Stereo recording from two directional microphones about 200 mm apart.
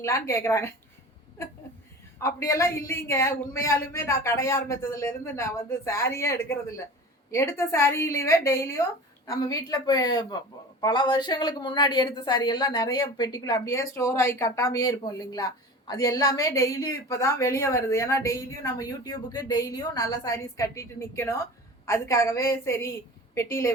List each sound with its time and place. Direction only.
0.0 s a woman's voice: 15° left (ahead or behind)
2.1 s a woman's voice: 15° left (ahead or behind)